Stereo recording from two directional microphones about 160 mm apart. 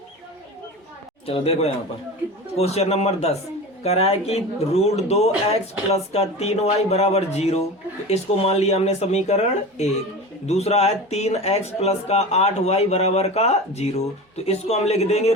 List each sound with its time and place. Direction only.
1.3 s speech: 40° left (ahead or behind)